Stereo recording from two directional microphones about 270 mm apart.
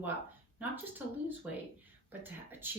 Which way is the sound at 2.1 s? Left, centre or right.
Centre.